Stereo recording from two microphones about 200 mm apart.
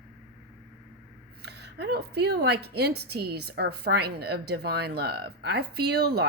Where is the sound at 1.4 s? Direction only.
55° right (ahead or behind).